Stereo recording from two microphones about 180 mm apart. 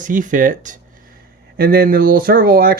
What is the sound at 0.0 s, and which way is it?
Speech, 45° right (ahead or behind).